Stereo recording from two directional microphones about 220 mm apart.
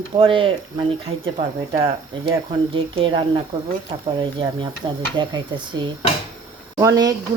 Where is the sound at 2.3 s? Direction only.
20° right (ahead or behind).